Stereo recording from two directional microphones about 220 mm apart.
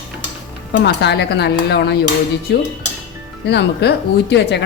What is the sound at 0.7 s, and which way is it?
Cutlery, 50° left (ahead or behind).